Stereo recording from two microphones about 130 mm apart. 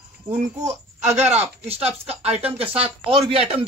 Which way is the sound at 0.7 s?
60° right (ahead or behind).